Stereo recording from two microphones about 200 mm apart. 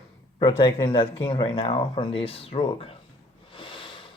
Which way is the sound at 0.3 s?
20° left (ahead or behind).